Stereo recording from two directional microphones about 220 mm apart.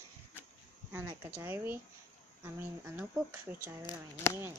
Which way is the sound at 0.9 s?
10° right (ahead or behind).